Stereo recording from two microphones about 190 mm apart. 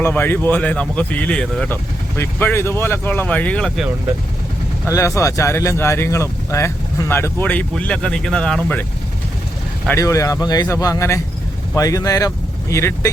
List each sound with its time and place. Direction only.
0.0 s speech: 10° left (ahead or behind)
4.9 s speech: 15° left (ahead or behind)
9.8 s speech: 15° left (ahead or behind)